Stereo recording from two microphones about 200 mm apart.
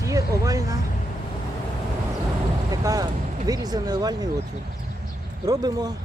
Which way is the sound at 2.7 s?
15° right (ahead or behind).